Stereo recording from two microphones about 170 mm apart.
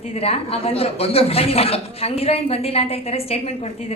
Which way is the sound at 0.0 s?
35° left (ahead or behind).